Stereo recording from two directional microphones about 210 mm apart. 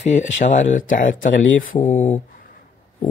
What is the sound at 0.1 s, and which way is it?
Speech, 35° left (ahead or behind).